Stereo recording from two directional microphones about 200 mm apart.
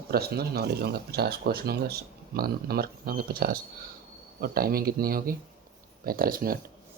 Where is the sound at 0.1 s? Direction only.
50° right (ahead or behind).